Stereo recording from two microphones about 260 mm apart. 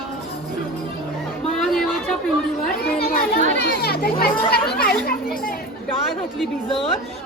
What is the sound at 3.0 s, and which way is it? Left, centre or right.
Children playing, left.